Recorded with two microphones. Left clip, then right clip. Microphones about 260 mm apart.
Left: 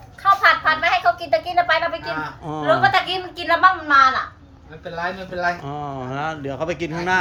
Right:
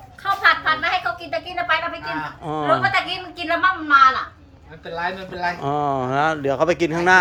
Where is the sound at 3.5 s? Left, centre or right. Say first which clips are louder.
Left 2 dB; centre.